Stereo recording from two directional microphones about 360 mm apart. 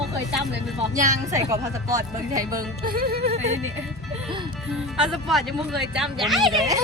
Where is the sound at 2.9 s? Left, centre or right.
Right.